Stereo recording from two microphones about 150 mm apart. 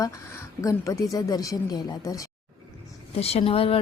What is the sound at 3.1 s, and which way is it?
Speech, 40° left (ahead or behind).